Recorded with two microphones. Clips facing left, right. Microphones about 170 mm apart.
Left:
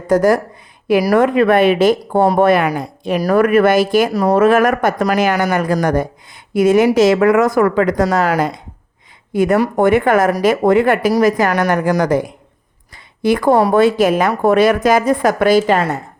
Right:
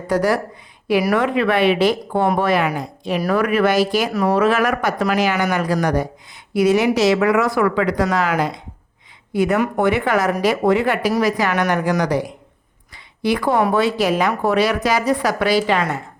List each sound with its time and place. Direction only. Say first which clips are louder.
0.1 s speech: left 6 dB; 45° left (ahead or behind)
4.1 s speech: left 5 dB; 35° left (ahead or behind)